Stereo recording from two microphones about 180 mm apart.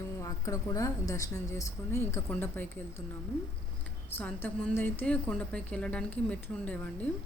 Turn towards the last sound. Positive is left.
turn(degrees=10)  # may be behind; listen again after turning